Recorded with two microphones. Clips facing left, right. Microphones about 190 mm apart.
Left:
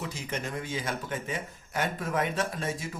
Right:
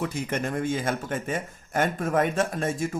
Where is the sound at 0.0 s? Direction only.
55° right (ahead or behind).